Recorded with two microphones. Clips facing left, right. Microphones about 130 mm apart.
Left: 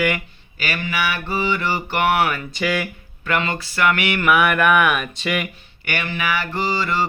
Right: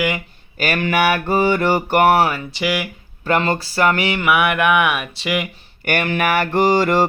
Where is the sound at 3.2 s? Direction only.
35° right (ahead or behind).